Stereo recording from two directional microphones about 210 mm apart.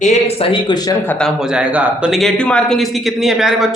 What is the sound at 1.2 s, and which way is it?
Speech, centre (ahead or behind).